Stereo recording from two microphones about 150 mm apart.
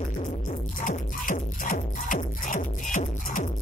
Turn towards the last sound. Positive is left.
turn(degrees=60)  # may be behind; listen again after turning